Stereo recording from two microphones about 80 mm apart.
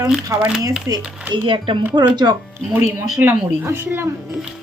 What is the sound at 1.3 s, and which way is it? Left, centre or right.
Speech, right.